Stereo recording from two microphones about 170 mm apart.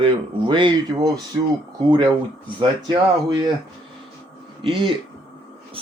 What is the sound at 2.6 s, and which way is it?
Speech, 25° right (ahead or behind).